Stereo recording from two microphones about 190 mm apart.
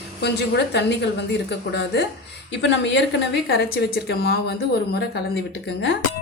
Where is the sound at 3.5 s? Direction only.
55° left (ahead or behind).